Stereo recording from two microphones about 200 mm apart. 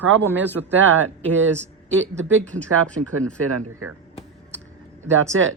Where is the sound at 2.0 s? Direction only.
70° right (ahead or behind).